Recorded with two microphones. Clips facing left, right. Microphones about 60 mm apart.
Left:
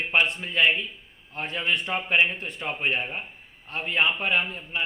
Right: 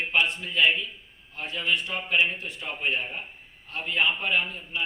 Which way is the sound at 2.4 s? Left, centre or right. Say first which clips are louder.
Left 3 dB; left.